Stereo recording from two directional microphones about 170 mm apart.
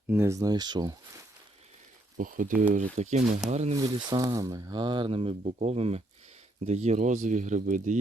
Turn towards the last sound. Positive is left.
turn(degrees=-45)  # may be behind; listen again after turning